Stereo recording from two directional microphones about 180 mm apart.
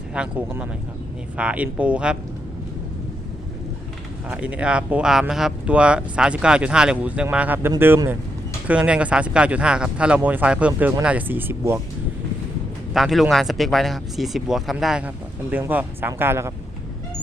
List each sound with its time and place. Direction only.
0.1 s speech: 5° right (ahead or behind)
4.3 s speech: 5° right (ahead or behind)
12.9 s speech: centre (ahead or behind)